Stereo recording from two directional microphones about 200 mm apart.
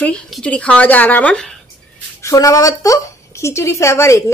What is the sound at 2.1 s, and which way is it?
A woman's voice, 15° left (ahead or behind).